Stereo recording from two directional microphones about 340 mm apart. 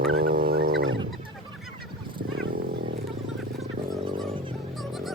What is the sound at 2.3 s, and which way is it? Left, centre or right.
Wild animals, right.